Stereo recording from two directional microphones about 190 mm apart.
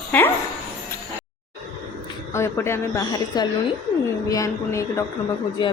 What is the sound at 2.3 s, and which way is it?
A woman's voice, 15° left (ahead or behind).